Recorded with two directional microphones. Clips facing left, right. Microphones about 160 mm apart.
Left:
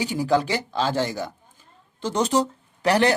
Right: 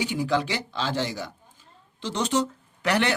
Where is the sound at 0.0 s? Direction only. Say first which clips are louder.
Left 3 dB; 40° left (ahead or behind).